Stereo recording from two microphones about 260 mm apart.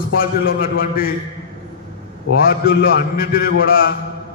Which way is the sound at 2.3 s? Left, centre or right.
Left.